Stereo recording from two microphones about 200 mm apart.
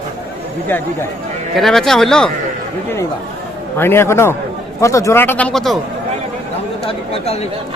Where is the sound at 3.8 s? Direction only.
10° left (ahead or behind).